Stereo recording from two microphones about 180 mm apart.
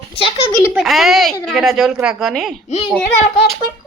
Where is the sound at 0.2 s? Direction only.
30° left (ahead or behind).